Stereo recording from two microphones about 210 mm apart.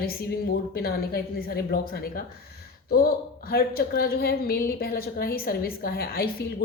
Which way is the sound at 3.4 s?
45° left (ahead or behind).